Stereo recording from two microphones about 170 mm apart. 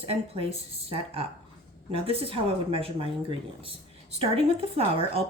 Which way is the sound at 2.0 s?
35° right (ahead or behind).